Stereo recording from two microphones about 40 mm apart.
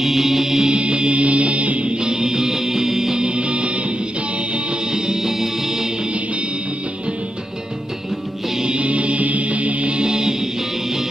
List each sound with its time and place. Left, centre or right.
0.0 s music: centre
0.7 s music: right
1.1 s music: right
2.0 s music: centre
3.3 s music: right
4.9 s music: centre
8.6 s music: right
9.9 s music: centre